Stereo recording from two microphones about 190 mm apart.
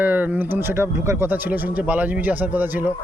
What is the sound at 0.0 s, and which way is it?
Speech, 10° right (ahead or behind).